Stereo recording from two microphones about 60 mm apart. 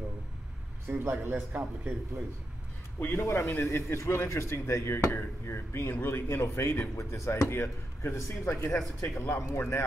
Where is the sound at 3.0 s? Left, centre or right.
Left.